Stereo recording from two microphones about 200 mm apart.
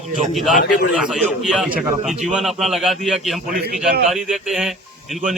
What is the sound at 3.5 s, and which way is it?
Speech, 45° right (ahead or behind).